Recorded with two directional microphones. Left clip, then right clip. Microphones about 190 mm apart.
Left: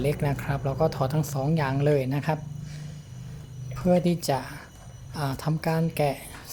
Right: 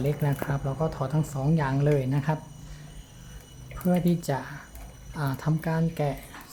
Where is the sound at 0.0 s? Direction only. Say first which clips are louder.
Left 2 dB; 30° left (ahead or behind).